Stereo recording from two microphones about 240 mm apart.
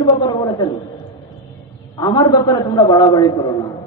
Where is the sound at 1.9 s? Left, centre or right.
Centre.